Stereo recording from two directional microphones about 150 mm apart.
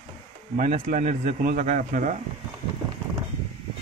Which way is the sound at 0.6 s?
60° right (ahead or behind).